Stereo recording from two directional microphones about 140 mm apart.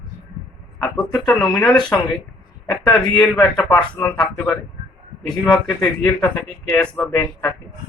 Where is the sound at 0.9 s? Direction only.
5° left (ahead or behind).